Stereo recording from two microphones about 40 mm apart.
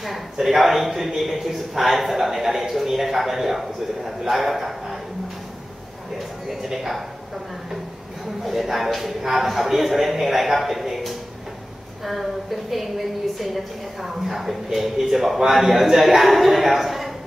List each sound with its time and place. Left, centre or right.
0.4 s a man's voice: centre
6.4 s speech: centre
8.5 s a man's voice: centre